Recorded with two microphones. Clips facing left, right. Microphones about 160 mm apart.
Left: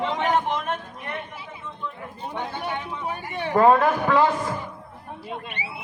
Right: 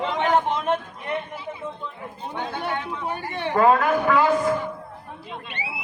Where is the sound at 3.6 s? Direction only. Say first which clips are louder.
Left 1 dB; 25° left (ahead or behind).